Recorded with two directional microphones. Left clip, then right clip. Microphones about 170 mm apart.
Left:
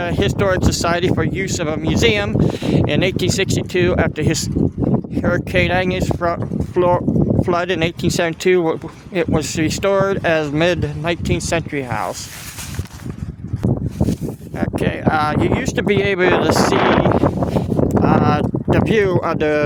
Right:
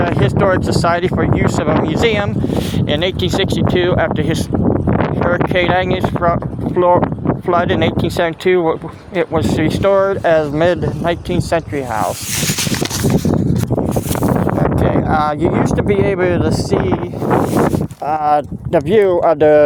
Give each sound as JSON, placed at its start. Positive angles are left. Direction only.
{"t": 0.0, "sound": "speech", "side_deg": 30}
{"t": 14.8, "sound": "speech", "side_deg": 10}